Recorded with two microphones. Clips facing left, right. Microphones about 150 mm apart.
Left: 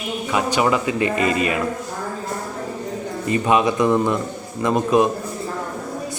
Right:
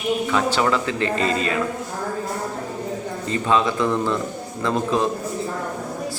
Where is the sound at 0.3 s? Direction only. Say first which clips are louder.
Left 4 dB; 15° left (ahead or behind).